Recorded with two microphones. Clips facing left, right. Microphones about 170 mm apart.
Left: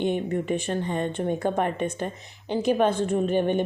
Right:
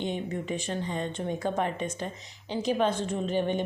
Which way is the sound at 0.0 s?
55° left (ahead or behind).